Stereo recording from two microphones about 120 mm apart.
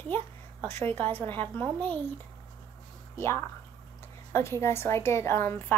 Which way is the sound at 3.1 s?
20° left (ahead or behind).